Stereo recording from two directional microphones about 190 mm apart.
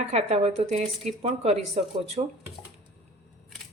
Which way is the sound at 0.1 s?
35° right (ahead or behind).